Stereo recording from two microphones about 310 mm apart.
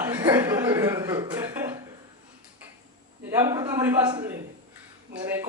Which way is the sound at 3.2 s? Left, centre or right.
Centre.